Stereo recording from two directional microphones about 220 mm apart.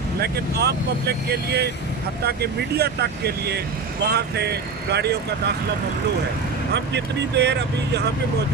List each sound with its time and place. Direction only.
0.2 s speech: 45° right (ahead or behind)
6.7 s speech: 50° right (ahead or behind)